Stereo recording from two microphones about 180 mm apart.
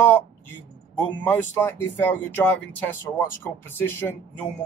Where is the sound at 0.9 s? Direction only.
10° left (ahead or behind).